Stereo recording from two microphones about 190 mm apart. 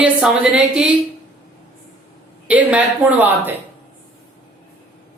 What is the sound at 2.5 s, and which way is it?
Speech, 10° right (ahead or behind).